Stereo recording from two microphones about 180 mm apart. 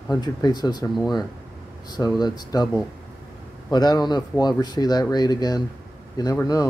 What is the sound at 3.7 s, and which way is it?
Speech, 25° left (ahead or behind).